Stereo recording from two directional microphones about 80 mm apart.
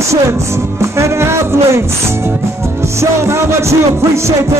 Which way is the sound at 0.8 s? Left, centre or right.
Right.